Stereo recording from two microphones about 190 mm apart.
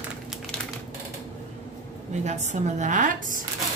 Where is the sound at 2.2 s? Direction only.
35° right (ahead or behind).